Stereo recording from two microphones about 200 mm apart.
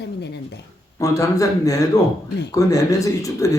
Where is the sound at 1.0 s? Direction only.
15° left (ahead or behind).